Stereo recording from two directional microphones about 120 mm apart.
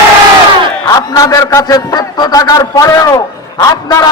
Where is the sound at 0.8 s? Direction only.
30° left (ahead or behind).